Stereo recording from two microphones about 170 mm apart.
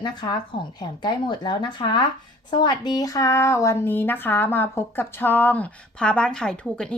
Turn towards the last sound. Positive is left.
turn(degrees=5)  # may be behind; listen again after turning